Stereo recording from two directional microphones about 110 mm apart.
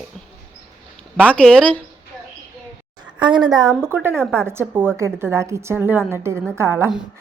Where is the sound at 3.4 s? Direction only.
35° right (ahead or behind).